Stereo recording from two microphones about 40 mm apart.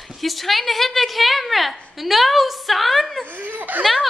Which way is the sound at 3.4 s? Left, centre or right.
Right.